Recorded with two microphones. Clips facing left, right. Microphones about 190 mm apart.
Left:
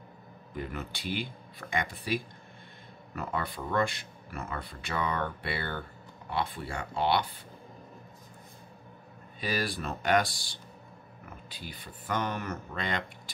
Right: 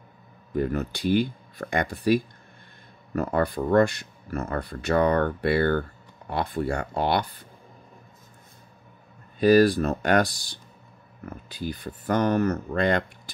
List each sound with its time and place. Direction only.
0.6 s speech: 40° right (ahead or behind)
9.4 s speech: 45° right (ahead or behind)